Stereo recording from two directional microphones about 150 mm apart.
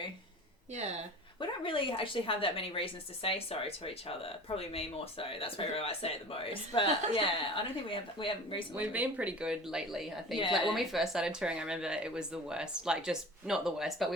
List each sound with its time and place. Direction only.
1.4 s speech: 35° left (ahead or behind)
8.7 s speech: 10° right (ahead or behind)